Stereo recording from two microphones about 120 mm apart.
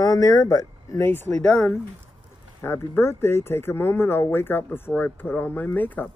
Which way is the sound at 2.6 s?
20° left (ahead or behind).